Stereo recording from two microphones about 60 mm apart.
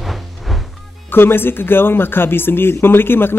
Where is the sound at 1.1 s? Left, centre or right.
Left.